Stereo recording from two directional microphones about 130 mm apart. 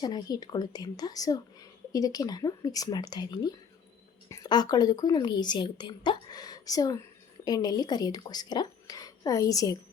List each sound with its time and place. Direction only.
0.0 s a woman's voice: 30° left (ahead or behind)